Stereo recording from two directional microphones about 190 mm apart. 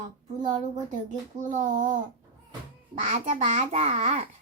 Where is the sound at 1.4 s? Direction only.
40° right (ahead or behind).